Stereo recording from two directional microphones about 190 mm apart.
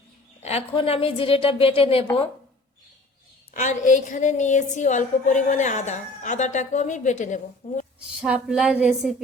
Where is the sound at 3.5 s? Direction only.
40° left (ahead or behind).